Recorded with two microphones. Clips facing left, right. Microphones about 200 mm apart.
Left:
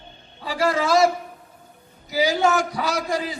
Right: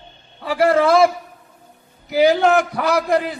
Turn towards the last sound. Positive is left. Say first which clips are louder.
# right 7 dB
turn(degrees=-60)  # may be behind; listen again after turning